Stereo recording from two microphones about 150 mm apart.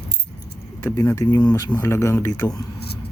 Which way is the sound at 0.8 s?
20° left (ahead or behind).